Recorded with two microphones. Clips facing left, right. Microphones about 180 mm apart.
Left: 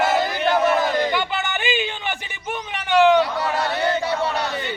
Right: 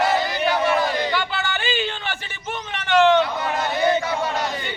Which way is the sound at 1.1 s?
20° left (ahead or behind).